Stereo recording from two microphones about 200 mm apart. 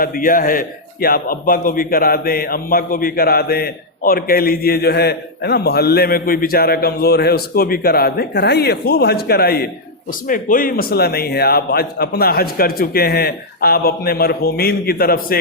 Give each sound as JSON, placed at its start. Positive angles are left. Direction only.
{"t": 0.0, "sound": "a man's voice", "side_deg": 45}